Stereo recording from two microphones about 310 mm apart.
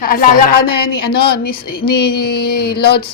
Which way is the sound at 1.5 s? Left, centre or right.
Left.